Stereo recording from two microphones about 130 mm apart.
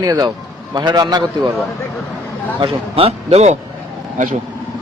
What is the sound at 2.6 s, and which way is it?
Speech, 50° right (ahead or behind).